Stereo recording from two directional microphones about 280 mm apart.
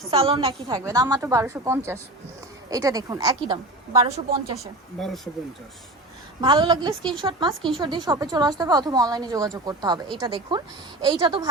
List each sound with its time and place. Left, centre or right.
0.1 s a woman's voice: right
4.9 s speech: centre
6.4 s a woman's voice: centre